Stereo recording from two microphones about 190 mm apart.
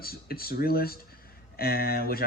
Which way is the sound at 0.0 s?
50° left (ahead or behind).